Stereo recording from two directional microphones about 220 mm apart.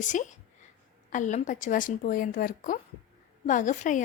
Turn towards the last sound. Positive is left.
turn(degrees=35)  # may be behind; listen again after turning